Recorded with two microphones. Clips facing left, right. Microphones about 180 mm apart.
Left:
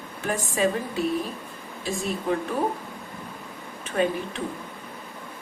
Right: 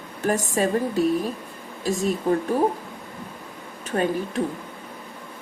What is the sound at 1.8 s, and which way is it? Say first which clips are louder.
Speech: right 6 dB; 40° right (ahead or behind).